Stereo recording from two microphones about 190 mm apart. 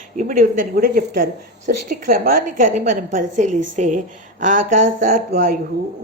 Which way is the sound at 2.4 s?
40° right (ahead or behind).